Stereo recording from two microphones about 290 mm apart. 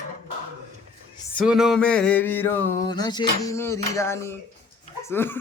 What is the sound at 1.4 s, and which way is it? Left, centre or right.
Speech, centre.